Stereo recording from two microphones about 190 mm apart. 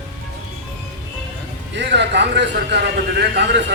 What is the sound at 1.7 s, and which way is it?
A man's voice, 65° right (ahead or behind).